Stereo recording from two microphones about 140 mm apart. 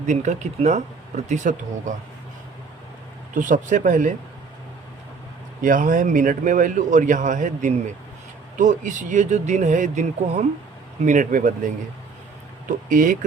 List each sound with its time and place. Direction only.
0.0 s speech: 60° right (ahead or behind)
3.3 s a man's voice: 70° right (ahead or behind)
5.6 s a man's voice: 70° right (ahead or behind)
12.6 s speech: 75° right (ahead or behind)